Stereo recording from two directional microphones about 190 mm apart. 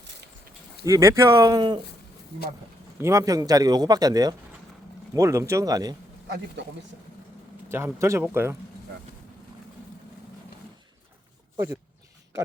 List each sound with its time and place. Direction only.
0.9 s speech: 15° right (ahead or behind)
3.0 s a man's voice: 15° right (ahead or behind)
6.2 s speech: 65° right (ahead or behind)
7.7 s speech: 15° right (ahead or behind)